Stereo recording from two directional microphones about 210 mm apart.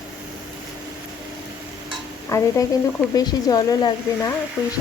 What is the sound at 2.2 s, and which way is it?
Speech, 15° left (ahead or behind).